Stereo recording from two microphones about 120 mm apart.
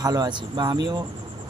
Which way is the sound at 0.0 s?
35° right (ahead or behind).